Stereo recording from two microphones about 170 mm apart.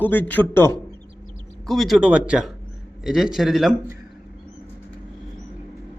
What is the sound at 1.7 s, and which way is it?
A man's voice, centre (ahead or behind).